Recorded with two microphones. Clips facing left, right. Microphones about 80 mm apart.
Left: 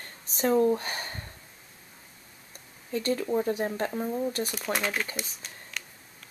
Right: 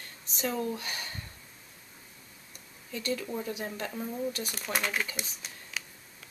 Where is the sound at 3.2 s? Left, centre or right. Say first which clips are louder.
Left 8 dB; left.